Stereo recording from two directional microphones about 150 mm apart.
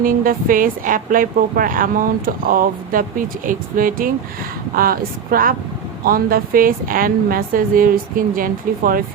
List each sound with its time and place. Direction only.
0.0 s speech: 70° right (ahead or behind)